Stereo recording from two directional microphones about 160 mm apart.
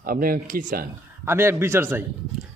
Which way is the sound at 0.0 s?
65° right (ahead or behind).